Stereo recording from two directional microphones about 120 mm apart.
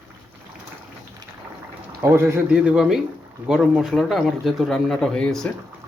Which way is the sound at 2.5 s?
5° right (ahead or behind).